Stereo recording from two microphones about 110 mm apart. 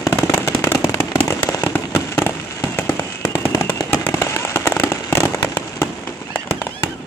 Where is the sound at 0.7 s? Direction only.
30° left (ahead or behind).